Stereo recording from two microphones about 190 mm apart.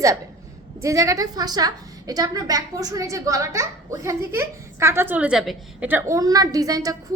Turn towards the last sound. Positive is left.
turn(degrees=-20)  # may be behind; listen again after turning